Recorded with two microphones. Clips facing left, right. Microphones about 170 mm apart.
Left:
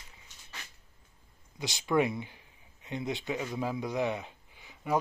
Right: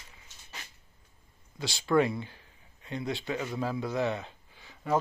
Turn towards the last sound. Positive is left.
turn(degrees=15)  # may be behind; listen again after turning